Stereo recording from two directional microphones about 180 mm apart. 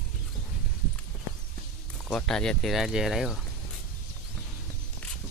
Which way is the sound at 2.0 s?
5° left (ahead or behind).